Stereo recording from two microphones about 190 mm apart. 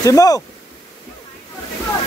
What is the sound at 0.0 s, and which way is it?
Speech, 15° left (ahead or behind).